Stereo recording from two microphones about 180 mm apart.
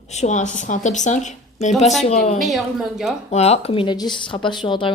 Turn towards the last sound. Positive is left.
turn(degrees=25)  # may be behind; listen again after turning